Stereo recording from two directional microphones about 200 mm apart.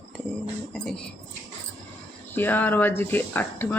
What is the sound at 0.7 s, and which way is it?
Speech, centre (ahead or behind).